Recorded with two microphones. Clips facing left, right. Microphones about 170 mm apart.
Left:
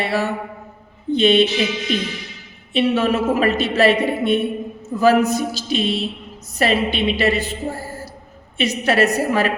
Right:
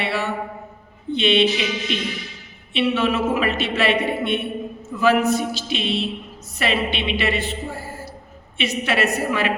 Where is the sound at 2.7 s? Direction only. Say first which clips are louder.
Left 3 dB; 40° left (ahead or behind).